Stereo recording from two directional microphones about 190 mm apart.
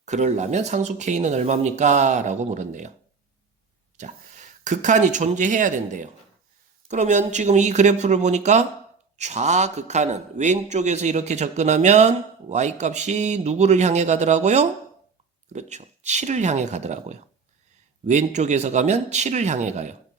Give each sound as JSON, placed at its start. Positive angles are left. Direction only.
{"t": 0.0, "sound": "a man's voice", "side_deg": -40}
{"t": 3.9, "sound": "a man's voice", "side_deg": -40}